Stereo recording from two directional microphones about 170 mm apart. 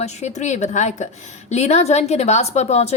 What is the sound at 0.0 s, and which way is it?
A woman's voice, 45° left (ahead or behind).